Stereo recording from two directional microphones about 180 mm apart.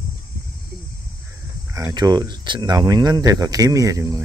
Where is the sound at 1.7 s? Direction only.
20° right (ahead or behind).